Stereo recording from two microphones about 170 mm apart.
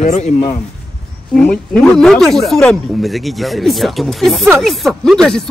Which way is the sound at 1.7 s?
5° left (ahead or behind).